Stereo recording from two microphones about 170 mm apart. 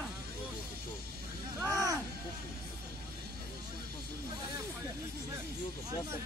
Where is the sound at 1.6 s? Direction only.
20° right (ahead or behind).